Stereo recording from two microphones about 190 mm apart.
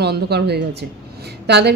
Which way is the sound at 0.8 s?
60° right (ahead or behind).